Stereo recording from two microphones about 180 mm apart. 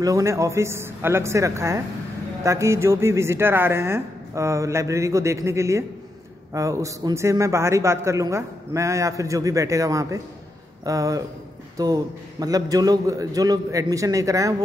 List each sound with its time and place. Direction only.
0.0 s a man's voice: 15° right (ahead or behind)